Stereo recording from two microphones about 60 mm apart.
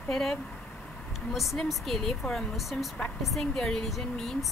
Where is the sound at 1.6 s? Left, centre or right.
Centre.